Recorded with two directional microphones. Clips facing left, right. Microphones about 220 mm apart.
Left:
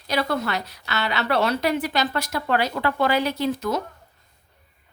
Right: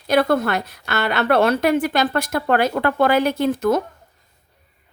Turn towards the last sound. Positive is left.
turn(degrees=-50)  # may be behind; listen again after turning